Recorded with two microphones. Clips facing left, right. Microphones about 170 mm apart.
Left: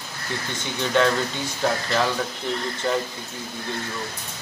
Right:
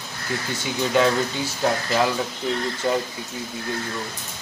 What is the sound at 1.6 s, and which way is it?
Speech, 5° right (ahead or behind).